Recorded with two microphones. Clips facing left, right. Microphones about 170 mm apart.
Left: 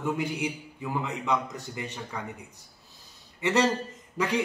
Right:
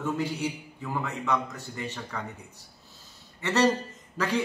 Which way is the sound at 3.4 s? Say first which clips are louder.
Even; 15° left (ahead or behind).